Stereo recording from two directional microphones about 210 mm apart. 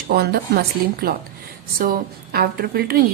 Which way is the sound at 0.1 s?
50° right (ahead or behind).